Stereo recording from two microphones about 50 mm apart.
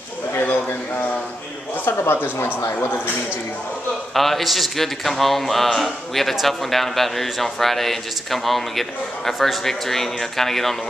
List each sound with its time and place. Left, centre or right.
1.9 s speech: left
2.3 s speech: left
4.1 s a man's voice: centre